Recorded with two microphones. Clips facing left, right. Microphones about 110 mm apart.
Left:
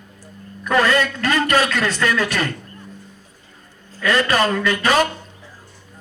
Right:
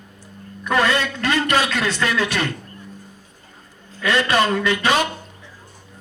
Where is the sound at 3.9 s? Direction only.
40° left (ahead or behind).